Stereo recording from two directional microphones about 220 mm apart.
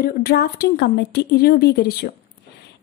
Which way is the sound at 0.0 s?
45° left (ahead or behind).